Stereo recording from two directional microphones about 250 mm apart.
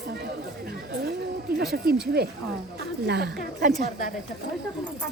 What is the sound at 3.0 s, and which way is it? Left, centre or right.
Speech, right.